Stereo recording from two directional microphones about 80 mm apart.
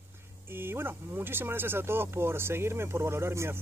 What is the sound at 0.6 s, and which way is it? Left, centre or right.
Speech, right.